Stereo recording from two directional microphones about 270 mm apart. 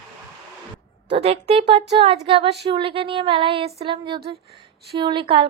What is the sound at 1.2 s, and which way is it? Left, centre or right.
Speech, right.